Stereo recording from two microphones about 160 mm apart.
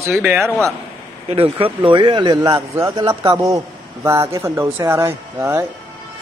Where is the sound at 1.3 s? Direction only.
35° right (ahead or behind); by 5.6 s 15° right (ahead or behind).